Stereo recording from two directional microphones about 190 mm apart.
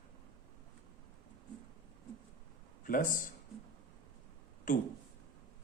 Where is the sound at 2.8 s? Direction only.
45° left (ahead or behind).